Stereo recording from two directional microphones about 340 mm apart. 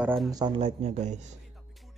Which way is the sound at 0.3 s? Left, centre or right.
Centre.